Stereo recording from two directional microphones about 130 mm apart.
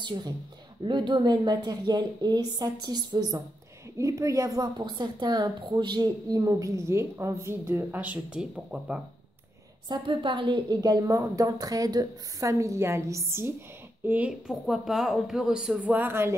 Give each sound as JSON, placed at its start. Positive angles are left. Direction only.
{"t": 0.0, "sound": "a woman's voice", "side_deg": -35}
{"t": 9.8, "sound": "a woman's voice", "side_deg": -40}
{"t": 14.5, "sound": "speech", "side_deg": 0}